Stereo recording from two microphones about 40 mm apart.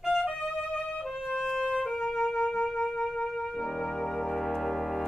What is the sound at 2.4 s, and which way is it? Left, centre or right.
Music, left.